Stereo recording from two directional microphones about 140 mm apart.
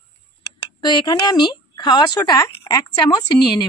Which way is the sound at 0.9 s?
30° left (ahead or behind).